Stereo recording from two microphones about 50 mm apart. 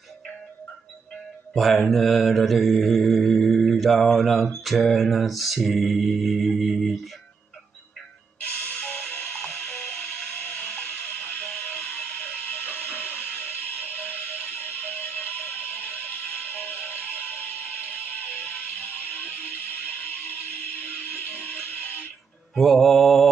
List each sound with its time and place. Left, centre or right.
1.5 s mantra: centre
8.5 s music: left
9.4 s ratchet: centre
10.4 s music: left
22.6 s mantra: centre